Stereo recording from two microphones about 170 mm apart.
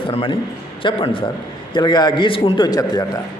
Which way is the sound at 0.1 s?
30° left (ahead or behind).